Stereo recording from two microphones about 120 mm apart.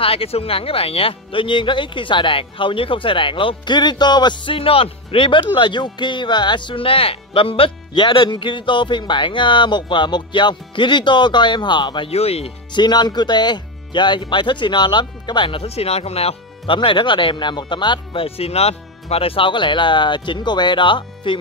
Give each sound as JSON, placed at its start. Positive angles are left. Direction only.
{"t": 0.0, "sound": "speech", "side_deg": 50}
{"t": 12.1, "sound": "speech", "side_deg": 60}
{"t": 12.7, "sound": "speech", "side_deg": 35}